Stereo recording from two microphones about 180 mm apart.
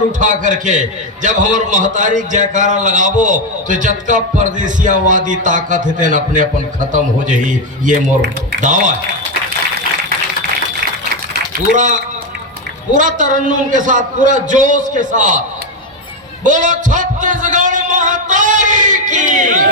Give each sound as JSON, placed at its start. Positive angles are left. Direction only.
{"t": 0.2, "sound": "a man's voice", "side_deg": -45}
{"t": 8.6, "sound": "a man's voice", "side_deg": -45}
{"t": 11.7, "sound": "a man's voice", "side_deg": -45}